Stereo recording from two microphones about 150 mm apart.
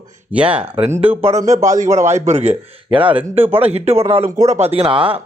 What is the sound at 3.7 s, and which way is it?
Speech, 40° right (ahead or behind).